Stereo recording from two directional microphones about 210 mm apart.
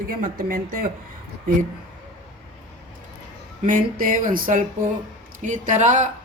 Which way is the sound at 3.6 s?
40° right (ahead or behind).